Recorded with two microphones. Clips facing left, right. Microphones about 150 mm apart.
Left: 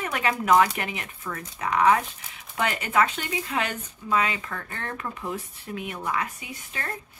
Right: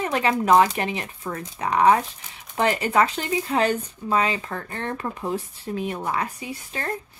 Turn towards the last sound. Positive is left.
turn(degrees=-35)  # may be behind; listen again after turning